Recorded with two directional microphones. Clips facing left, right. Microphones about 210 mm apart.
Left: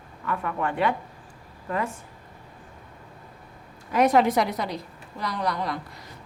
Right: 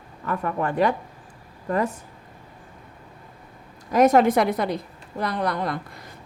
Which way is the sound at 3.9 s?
45° right (ahead or behind).